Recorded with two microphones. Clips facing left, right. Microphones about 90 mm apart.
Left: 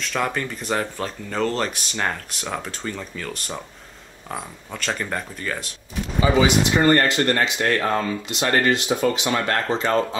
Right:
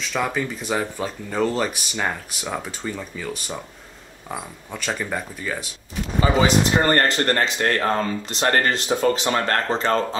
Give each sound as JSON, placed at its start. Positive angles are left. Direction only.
{"t": 0.0, "sound": "speech", "side_deg": -5}
{"t": 6.4, "sound": "speech", "side_deg": -40}